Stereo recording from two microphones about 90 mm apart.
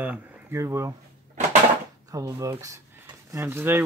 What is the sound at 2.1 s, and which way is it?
Speech, 35° right (ahead or behind).